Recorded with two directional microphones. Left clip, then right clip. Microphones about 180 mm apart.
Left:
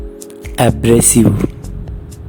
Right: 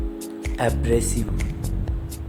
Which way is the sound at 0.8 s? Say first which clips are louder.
Left 12 dB; 50° left (ahead or behind).